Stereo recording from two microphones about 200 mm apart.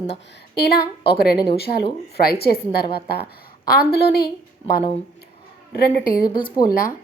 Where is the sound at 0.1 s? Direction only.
55° left (ahead or behind).